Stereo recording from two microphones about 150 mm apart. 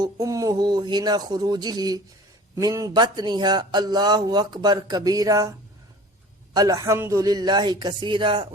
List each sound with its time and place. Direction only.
0.0 s speech: 20° right (ahead or behind)